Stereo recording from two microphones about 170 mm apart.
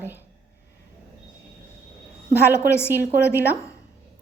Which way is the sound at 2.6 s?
15° left (ahead or behind).